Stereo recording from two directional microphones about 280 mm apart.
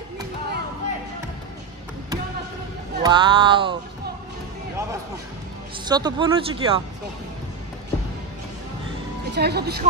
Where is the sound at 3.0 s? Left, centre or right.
Centre.